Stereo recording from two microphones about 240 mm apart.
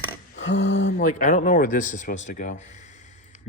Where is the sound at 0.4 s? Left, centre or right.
Left.